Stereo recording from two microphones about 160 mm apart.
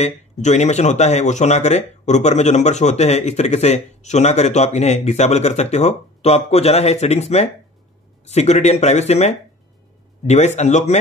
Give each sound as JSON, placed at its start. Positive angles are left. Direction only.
{"t": 0.0, "sound": "speech", "side_deg": 45}